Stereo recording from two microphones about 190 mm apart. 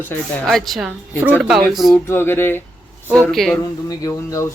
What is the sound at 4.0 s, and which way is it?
Speech, 20° left (ahead or behind).